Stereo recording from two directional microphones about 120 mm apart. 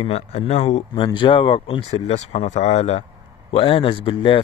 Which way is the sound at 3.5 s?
50° left (ahead or behind).